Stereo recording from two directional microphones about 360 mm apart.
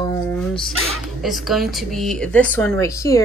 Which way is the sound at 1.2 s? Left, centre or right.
Centre.